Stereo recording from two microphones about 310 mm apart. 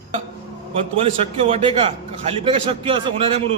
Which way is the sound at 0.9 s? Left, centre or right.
Centre.